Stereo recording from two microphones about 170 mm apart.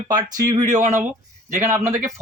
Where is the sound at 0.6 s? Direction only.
45° right (ahead or behind).